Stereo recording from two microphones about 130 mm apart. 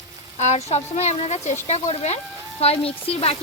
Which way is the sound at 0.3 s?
60° left (ahead or behind).